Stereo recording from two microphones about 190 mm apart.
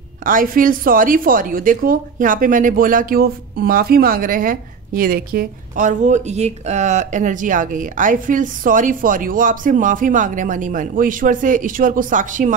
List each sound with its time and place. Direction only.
0.2 s a woman's voice: 45° right (ahead or behind)